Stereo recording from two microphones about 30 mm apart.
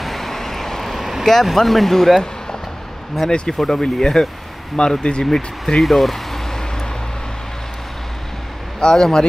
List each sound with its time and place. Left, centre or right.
0.0 s vehicle: centre
0.9 s vehicle: centre
1.2 s speech: centre
3.4 s speech: centre
5.8 s speech: centre
8.7 s a sound: left